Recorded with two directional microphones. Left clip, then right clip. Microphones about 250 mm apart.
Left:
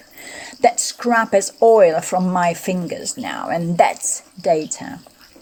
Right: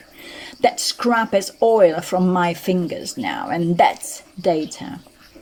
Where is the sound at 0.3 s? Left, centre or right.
Left.